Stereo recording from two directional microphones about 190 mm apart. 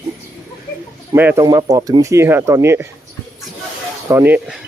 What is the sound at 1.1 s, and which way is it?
Speech, 10° right (ahead or behind).